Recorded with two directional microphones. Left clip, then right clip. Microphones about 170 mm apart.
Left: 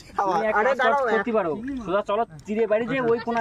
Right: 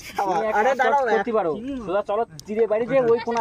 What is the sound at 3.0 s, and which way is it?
Speech, 75° left (ahead or behind).